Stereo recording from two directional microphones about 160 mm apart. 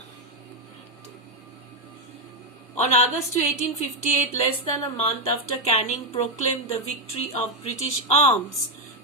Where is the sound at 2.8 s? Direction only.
45° left (ahead or behind).